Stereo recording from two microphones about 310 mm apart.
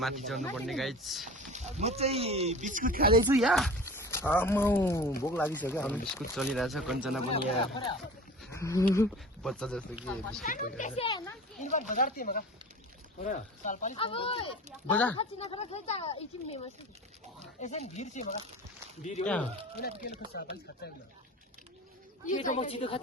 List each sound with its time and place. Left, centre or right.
0.0 s speech: centre
1.3 s speech: right
3.2 s speech: centre
8.5 s speech: centre
10.4 s speech: left
14.8 s speech: centre
15.2 s speech: centre
17.6 s speech: left
19.2 s speech: centre
20.1 s speech: left
22.3 s speech: left